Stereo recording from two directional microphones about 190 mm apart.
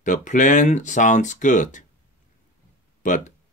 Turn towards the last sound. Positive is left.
turn(degrees=40)  # may be behind; listen again after turning